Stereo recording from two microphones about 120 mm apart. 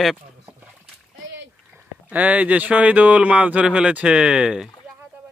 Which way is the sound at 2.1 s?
10° right (ahead or behind).